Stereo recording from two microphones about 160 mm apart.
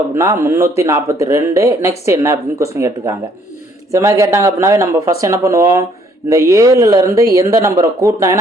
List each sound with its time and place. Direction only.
0.1 s speech: 15° right (ahead or behind)